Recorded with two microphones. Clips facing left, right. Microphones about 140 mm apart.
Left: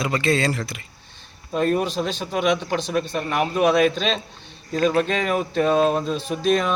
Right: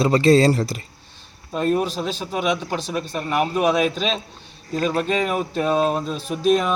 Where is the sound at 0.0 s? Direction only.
35° right (ahead or behind).